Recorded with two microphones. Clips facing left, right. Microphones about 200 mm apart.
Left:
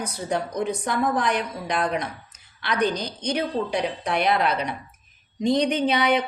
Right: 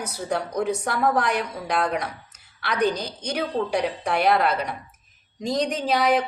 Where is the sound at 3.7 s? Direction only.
65° right (ahead or behind).